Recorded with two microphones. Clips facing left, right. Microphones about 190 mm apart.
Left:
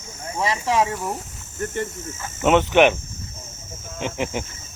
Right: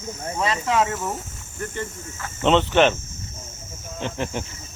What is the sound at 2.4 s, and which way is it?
Speech, 10° left (ahead or behind).